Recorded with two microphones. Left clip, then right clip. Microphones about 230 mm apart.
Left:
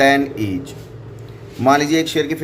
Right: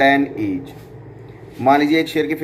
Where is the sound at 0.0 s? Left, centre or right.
Left.